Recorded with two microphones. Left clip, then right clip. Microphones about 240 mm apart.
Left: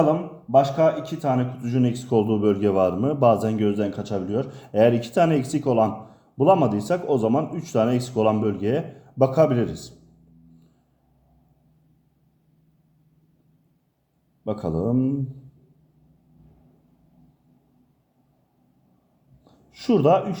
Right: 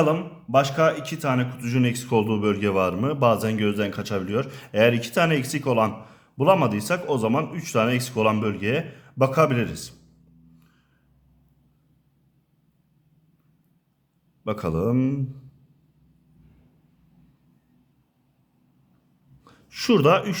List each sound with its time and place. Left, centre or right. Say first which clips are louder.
0.0 s speech: left 1 dB; right
14.4 s a man's voice: right 1 dB; right
19.7 s speech: even; right